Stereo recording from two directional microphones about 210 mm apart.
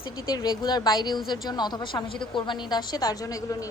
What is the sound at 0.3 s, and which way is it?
A woman's voice, 20° left (ahead or behind).